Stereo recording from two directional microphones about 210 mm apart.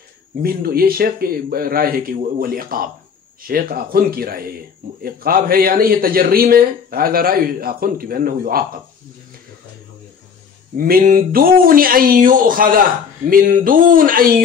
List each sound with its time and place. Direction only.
0.4 s a man's voice: 45° right (ahead or behind)
10.8 s a man's voice: 45° right (ahead or behind)
13.3 s a sound: 40° right (ahead or behind)